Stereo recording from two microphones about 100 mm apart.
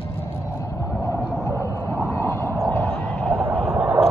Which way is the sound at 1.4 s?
25° right (ahead or behind).